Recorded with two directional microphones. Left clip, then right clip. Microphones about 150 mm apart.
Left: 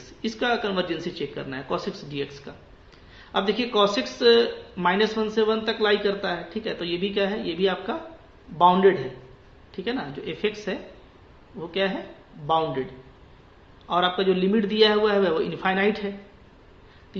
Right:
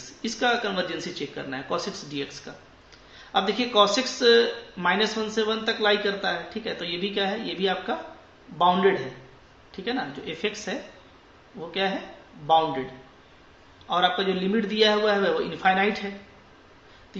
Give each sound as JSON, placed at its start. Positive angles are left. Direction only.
{"t": 0.2, "sound": "speech", "side_deg": 30}
{"t": 12.4, "sound": "speech", "side_deg": 35}
{"t": 13.8, "sound": "speech", "side_deg": 35}